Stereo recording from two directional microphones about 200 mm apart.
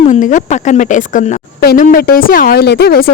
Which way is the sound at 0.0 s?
40° left (ahead or behind).